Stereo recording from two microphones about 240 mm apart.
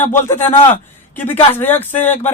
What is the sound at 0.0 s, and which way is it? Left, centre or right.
Speech, centre.